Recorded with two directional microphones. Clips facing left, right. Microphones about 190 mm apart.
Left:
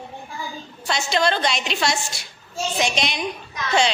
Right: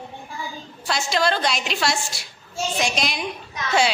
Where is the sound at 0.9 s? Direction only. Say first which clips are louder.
Left 1 dB; centre (ahead or behind).